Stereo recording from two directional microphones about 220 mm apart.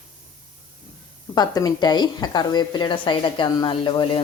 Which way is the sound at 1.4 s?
20° left (ahead or behind).